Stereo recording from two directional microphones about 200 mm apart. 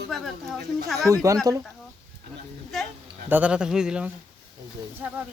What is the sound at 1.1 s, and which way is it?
Speech, 15° right (ahead or behind).